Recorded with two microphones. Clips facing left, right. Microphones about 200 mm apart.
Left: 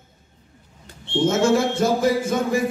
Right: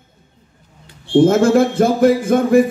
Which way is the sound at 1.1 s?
55° right (ahead or behind).